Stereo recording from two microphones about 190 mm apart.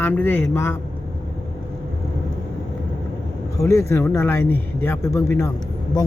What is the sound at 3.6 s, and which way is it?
Speech, 15° left (ahead or behind).